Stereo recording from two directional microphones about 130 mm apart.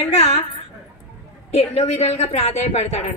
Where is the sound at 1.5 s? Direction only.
55° left (ahead or behind).